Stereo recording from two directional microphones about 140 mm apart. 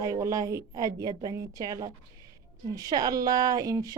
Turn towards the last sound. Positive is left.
turn(degrees=-25)  # may be behind; listen again after turning